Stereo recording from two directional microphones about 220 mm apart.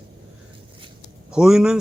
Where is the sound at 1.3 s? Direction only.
5° right (ahead or behind).